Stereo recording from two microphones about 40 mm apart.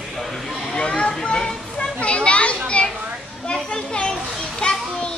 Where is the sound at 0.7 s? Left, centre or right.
Left.